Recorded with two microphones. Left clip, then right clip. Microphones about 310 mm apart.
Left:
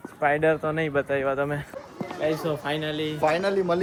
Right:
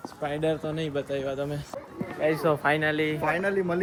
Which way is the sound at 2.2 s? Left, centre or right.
Centre.